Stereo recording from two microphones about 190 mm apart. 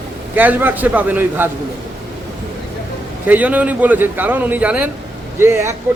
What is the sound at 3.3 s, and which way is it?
A man's voice, 10° right (ahead or behind).